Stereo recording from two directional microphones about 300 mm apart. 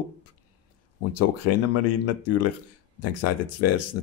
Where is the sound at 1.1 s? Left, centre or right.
Left.